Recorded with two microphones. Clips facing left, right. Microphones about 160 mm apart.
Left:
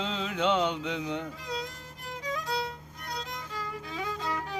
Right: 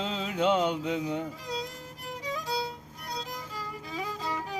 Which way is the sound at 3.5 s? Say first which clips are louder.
Left 1 dB; 5° right (ahead or behind).